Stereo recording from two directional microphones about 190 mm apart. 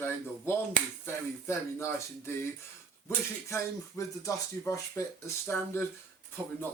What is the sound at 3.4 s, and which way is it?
Speech, 15° left (ahead or behind).